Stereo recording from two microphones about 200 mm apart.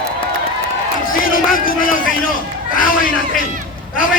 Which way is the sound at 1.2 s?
45° left (ahead or behind).